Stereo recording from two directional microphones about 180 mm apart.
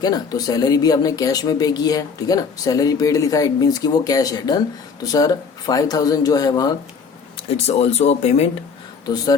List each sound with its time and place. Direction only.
0.0 s speech: 20° left (ahead or behind)
7.3 s speech: 35° left (ahead or behind)